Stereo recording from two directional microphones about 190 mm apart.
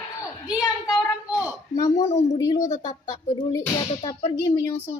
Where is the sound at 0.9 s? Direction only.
15° left (ahead or behind).